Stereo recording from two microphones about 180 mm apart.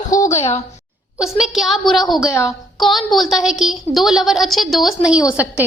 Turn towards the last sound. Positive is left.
turn(degrees=-10)  # may be behind; listen again after turning